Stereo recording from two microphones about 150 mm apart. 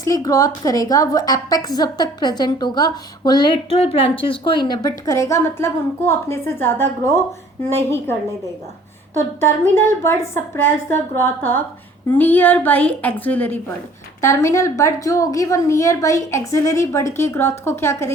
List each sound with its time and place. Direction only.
0.0 s a woman's voice: 20° left (ahead or behind)
9.1 s a woman's voice: 15° left (ahead or behind)